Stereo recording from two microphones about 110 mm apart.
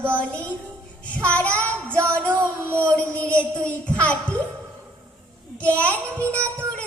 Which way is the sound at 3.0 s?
10° left (ahead or behind).